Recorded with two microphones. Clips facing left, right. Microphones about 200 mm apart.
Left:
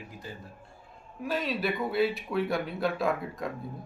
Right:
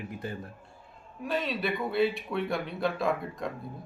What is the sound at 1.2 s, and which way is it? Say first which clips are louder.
Speech: even; centre (ahead or behind).